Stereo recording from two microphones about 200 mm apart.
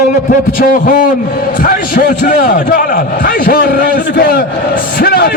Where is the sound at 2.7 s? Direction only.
40° left (ahead or behind).